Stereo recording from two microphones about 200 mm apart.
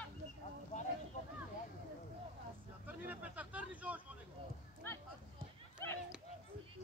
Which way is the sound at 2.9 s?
5° right (ahead or behind).